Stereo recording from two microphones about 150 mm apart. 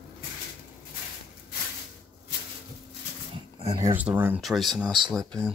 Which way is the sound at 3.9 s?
15° right (ahead or behind).